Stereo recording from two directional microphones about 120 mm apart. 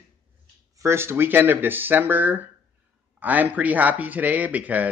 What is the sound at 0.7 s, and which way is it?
Speech, 20° right (ahead or behind).